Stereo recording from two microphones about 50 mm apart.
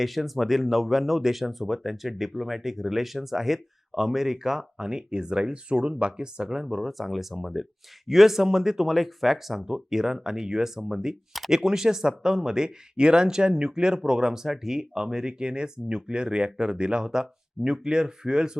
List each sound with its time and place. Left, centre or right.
0.0 s speech: centre
6.7 s speech: centre